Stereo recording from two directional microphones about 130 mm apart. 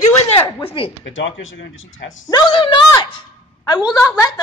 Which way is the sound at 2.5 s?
40° left (ahead or behind).